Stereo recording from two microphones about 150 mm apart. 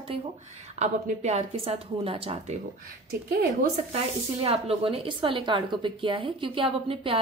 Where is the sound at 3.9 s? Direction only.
40° right (ahead or behind).